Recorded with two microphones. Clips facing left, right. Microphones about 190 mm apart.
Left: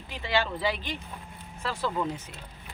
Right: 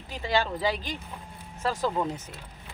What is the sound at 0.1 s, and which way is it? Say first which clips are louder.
Speech: right 1 dB; 40° right (ahead or behind).